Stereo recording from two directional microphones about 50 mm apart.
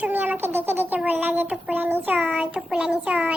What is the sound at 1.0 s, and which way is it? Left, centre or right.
Child singing, right.